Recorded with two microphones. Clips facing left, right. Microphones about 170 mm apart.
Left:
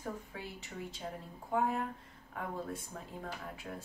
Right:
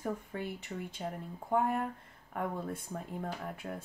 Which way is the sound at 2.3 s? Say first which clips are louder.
Right 4 dB; 55° right (ahead or behind).